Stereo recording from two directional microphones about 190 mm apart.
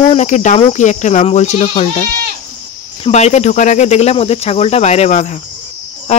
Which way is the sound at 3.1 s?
35° left (ahead or behind).